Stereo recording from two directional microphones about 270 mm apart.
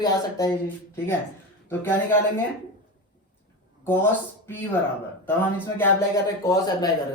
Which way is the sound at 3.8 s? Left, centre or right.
Centre.